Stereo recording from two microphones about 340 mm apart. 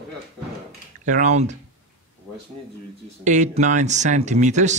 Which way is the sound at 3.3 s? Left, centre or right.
Right.